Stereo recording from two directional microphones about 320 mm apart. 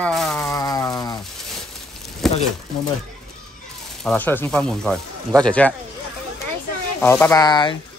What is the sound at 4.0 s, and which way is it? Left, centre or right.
Speech, centre.